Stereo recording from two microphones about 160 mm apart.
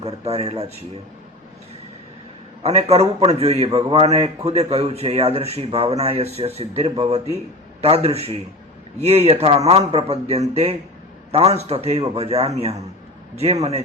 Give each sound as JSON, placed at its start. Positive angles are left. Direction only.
{"t": 0.0, "sound": "a man's voice", "side_deg": -40}
{"t": 2.6, "sound": "a man's voice", "side_deg": -40}